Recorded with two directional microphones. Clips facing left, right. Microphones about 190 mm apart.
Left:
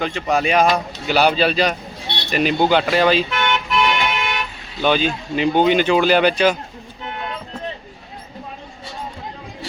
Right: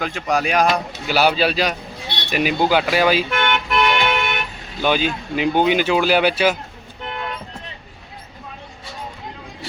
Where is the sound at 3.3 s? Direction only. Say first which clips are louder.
Even; 55° right (ahead or behind).